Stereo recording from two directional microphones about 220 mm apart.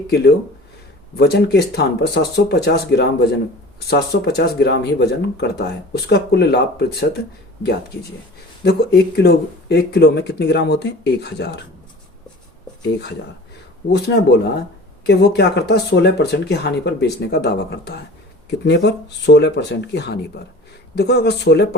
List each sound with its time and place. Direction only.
1.1 s speech: 50° left (ahead or behind)
8.6 s speech: 45° left (ahead or behind)
13.9 s speech: 50° left (ahead or behind)